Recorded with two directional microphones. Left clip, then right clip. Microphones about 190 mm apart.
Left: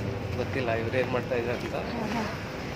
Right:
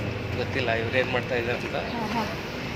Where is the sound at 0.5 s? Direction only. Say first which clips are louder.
Right 3 dB; 30° left (ahead or behind).